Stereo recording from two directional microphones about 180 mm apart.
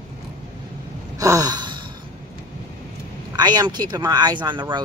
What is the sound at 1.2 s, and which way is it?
Sigh, 20° right (ahead or behind).